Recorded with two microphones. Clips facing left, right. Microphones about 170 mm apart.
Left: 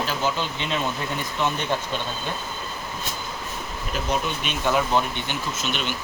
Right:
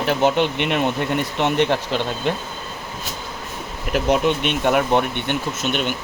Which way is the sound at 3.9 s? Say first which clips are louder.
Right 9 dB; 75° right (ahead or behind).